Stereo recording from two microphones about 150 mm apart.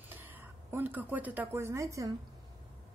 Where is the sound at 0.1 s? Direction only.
15° right (ahead or behind).